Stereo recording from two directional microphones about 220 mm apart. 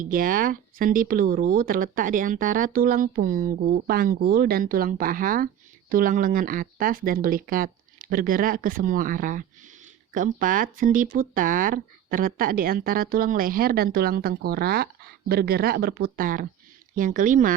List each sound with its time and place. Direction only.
0.0 s speech: 40° right (ahead or behind)